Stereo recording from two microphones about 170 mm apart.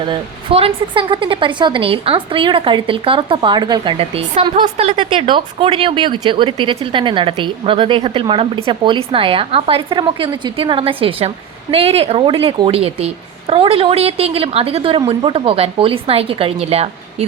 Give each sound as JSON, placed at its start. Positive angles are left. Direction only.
{"t": 0.0, "sound": "speech", "side_deg": -30}